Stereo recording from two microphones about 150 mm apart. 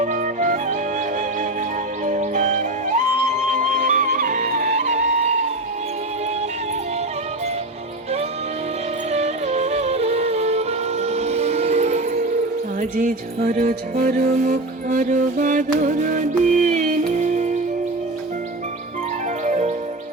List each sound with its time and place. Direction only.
0.0 s music: 55° right (ahead or behind)
2.0 s music: 55° right (ahead or behind)
9.1 s music: 45° right (ahead or behind)
12.8 s music: 60° right (ahead or behind)
19.5 s music: 50° right (ahead or behind)